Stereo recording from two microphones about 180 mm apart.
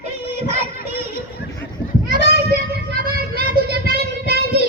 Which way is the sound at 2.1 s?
60° right (ahead or behind).